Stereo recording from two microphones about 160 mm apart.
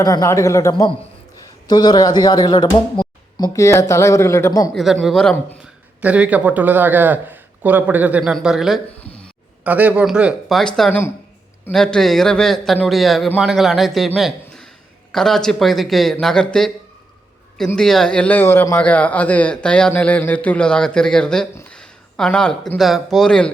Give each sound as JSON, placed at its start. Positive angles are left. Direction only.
{"t": 0.0, "sound": "speech", "side_deg": 20}
{"t": 0.7, "sound": "speech", "side_deg": 30}
{"t": 4.7, "sound": "a man's voice", "side_deg": 0}
{"t": 6.0, "sound": "speech", "side_deg": -10}
{"t": 9.0, "sound": "a sound", "side_deg": 5}
{"t": 9.6, "sound": "a man's voice", "side_deg": -10}
{"t": 17.7, "sound": "a man's voice", "side_deg": 5}